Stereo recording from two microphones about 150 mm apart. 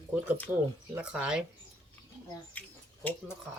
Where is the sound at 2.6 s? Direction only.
10° left (ahead or behind).